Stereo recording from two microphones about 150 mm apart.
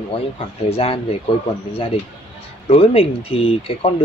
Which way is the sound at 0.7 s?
40° left (ahead or behind).